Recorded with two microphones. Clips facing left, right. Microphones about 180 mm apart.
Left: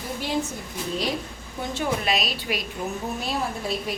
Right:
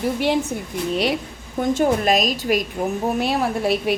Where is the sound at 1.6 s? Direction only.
45° right (ahead or behind).